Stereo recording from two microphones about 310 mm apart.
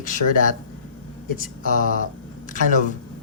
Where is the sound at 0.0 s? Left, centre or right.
Left.